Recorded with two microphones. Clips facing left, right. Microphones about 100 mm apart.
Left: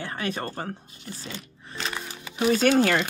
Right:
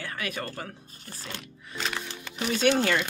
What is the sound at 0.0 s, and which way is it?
Speech, 30° left (ahead or behind).